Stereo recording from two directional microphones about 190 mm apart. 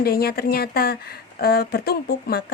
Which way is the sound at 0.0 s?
55° left (ahead or behind).